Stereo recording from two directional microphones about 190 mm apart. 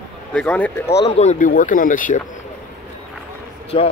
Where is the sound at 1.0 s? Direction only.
35° left (ahead or behind).